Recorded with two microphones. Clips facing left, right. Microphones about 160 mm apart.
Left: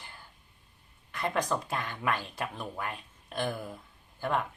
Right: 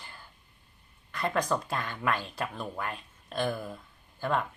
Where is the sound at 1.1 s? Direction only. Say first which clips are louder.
Right 1 dB; 20° left (ahead or behind).